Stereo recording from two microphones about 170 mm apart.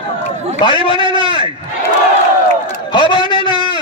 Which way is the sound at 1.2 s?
25° left (ahead or behind).